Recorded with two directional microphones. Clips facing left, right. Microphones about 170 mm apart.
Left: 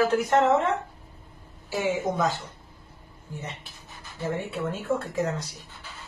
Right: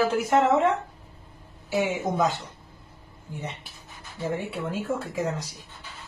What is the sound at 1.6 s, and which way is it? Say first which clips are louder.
Speech: right 1 dB; 15° right (ahead or behind).